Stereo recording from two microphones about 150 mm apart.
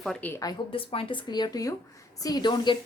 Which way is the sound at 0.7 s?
35° left (ahead or behind).